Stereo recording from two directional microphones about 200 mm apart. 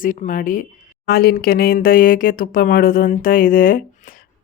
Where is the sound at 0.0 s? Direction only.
40° left (ahead or behind).